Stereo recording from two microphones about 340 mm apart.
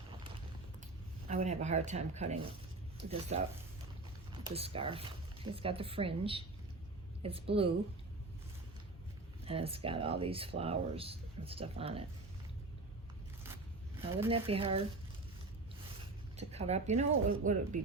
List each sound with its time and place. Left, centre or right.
1.3 s speech: centre
9.4 s speech: centre
13.4 s zipper: centre
16.4 s speech: centre